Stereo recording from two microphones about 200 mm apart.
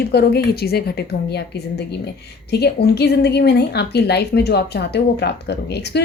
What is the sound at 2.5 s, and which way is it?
A woman's voice, 55° left (ahead or behind).